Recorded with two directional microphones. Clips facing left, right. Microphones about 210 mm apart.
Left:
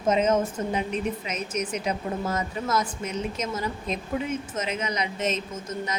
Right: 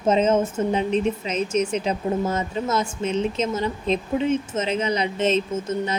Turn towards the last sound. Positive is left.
turn(degrees=-30)  # may be behind; listen again after turning